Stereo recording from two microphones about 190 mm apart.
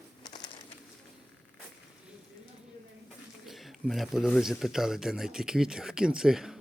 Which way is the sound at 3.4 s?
Centre (ahead or behind).